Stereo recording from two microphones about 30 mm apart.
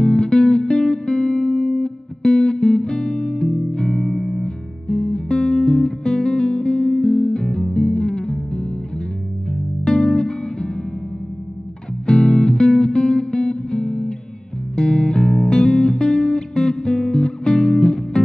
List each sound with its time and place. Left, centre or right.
0.0 s music: left
4.1 s music: centre
4.4 s music: left
12.1 s music: left